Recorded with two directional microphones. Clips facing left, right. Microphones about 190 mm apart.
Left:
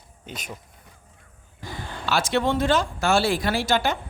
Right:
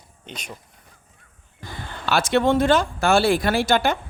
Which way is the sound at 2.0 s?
55° right (ahead or behind).